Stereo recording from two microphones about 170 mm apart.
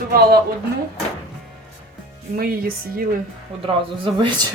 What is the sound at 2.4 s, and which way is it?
Speech, 60° right (ahead or behind).